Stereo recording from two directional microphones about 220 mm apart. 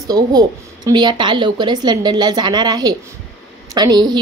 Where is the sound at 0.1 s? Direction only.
20° right (ahead or behind).